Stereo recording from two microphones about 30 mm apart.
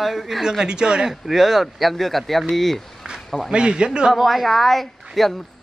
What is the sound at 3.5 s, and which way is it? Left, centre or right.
Speech, right.